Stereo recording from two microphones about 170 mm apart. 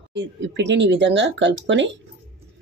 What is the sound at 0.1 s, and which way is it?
Speech, 90° right.